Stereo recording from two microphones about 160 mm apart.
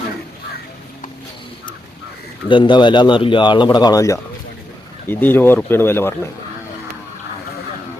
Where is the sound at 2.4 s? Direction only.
30° left (ahead or behind); by 6.3 s 15° left (ahead or behind).